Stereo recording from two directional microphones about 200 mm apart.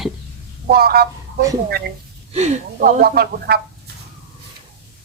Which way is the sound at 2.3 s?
35° right (ahead or behind).